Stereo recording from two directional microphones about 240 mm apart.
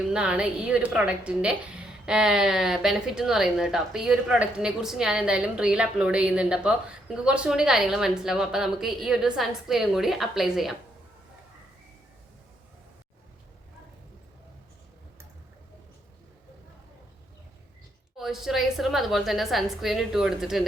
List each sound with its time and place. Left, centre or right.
0.1 s speech: centre
18.2 s speech: centre